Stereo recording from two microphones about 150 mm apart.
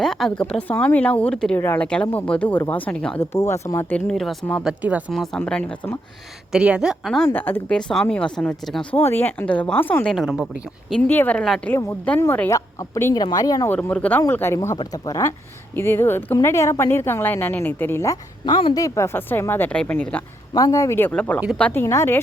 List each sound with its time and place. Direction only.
0.0 s speech: 5° left (ahead or behind)
3.2 s a woman's voice: 20° left (ahead or behind); by 4.4 s centre (ahead or behind)
4.6 s speech: 10° right (ahead or behind)
5.4 s speech: 5° left (ahead or behind)
6.5 s a woman's voice: 5° right (ahead or behind)
7.3 s speech: 15° left (ahead or behind)
8.9 s speech: 15° left (ahead or behind); by 11.0 s centre (ahead or behind)
11.0 s speech: 10° left (ahead or behind)
11.7 s speech: 15° left (ahead or behind)
13.7 s speech: 10° left (ahead or behind)
20.5 s speech: 25° left (ahead or behind)